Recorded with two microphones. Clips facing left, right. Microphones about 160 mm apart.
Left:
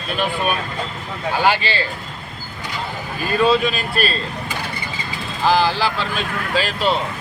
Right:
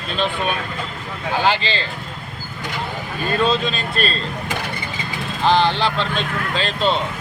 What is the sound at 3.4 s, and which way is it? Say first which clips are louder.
Speech: left 5 dB; 5° left (ahead or behind).